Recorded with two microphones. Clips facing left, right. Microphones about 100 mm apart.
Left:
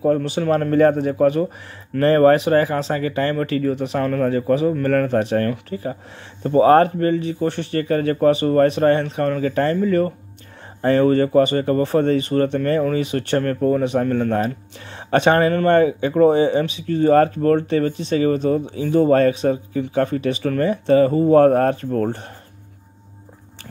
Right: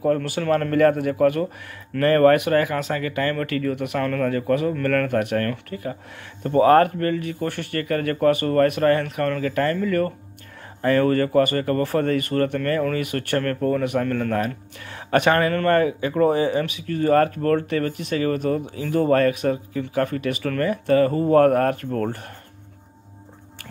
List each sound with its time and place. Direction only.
0.0 s speech: 20° left (ahead or behind)